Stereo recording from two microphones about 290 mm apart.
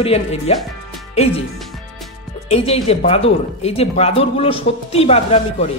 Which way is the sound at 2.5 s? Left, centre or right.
Centre.